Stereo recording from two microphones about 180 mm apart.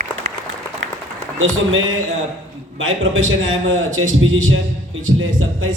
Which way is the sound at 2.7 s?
90° right.